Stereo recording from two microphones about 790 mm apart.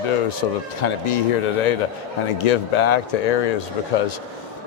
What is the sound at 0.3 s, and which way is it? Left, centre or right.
Speech, left.